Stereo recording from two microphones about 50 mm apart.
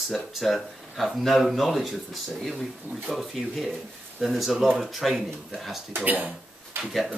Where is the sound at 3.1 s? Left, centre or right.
Centre.